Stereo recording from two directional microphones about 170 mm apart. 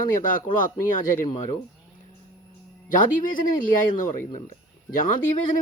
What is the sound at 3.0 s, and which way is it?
Speech, 50° left (ahead or behind).